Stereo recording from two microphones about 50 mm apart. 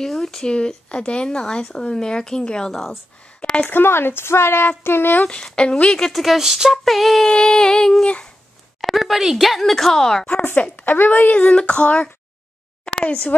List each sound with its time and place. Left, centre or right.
0.0 s speech: centre
0.5 s speech: centre
3.3 s a sound: left
3.6 s speech: left
5.2 s a woman's voice: centre
6.1 s female singing: centre
8.8 s speech: centre
10.6 s a woman's voice: left
12.8 s a sound: left